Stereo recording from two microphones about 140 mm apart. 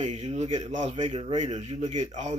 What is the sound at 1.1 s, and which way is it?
Speech, 45° right (ahead or behind).